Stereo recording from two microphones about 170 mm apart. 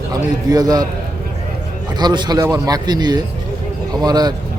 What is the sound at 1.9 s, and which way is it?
Speech, 25° right (ahead or behind).